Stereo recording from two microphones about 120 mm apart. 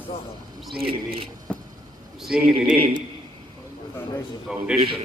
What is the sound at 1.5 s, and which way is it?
Vehicle, 10° left (ahead or behind).